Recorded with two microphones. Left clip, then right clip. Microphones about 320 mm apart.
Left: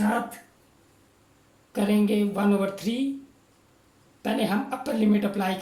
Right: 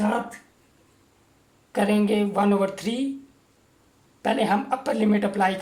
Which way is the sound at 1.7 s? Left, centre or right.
Right.